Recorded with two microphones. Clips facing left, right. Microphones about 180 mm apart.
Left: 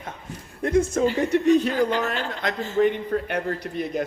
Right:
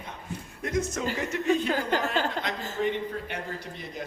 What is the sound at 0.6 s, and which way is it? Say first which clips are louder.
Speech: left 9 dB; 30° left (ahead or behind).